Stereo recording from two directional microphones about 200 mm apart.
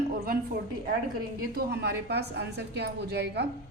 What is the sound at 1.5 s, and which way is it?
A woman's voice, 50° right (ahead or behind).